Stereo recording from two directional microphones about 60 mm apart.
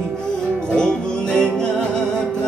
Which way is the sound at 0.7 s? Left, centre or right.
Centre.